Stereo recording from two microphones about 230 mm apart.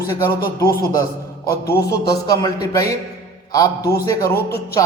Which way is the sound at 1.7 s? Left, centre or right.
Centre.